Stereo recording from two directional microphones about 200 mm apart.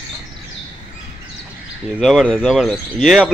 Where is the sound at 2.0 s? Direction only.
Centre (ahead or behind).